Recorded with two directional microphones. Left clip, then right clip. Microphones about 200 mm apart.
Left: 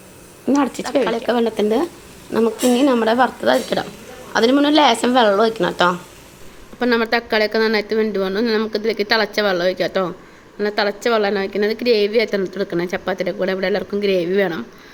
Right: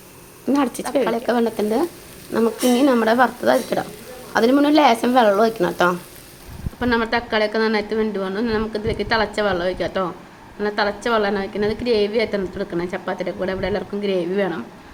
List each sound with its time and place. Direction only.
0.4 s a woman's voice: 5° left (ahead or behind)
6.7 s a woman's voice: 35° left (ahead or behind)